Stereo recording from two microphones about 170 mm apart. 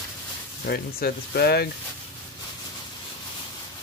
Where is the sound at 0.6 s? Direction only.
65° left (ahead or behind).